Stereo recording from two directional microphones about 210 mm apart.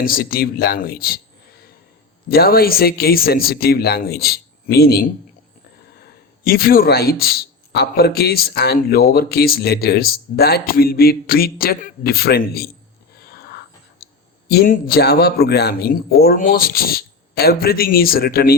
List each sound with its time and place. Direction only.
0.0 s a man's voice: 45° left (ahead or behind)
2.3 s a man's voice: 45° left (ahead or behind)
6.4 s a man's voice: 45° left (ahead or behind)
13.1 s a sound: 50° left (ahead or behind)
14.4 s a man's voice: 45° left (ahead or behind)